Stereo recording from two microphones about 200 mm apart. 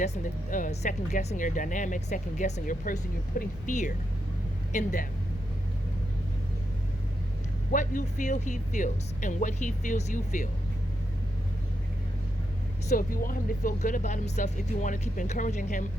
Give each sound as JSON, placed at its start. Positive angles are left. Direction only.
{"t": 0.0, "sound": "speech", "side_deg": 40}
{"t": 7.7, "sound": "speech", "side_deg": 40}
{"t": 12.9, "sound": "speech", "side_deg": 45}